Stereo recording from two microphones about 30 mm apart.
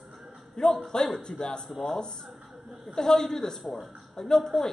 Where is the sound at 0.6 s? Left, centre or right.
Centre.